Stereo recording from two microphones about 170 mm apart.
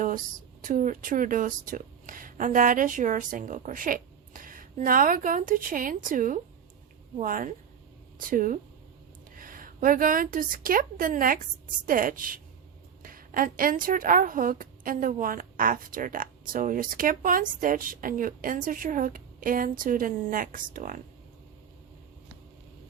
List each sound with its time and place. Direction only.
0.6 s a woman's voice: 50° right (ahead or behind)